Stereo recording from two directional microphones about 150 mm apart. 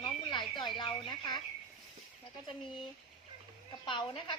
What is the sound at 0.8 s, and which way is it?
Speech, 30° left (ahead or behind).